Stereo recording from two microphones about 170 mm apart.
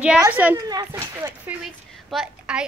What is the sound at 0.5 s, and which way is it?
Speech, 20° right (ahead or behind).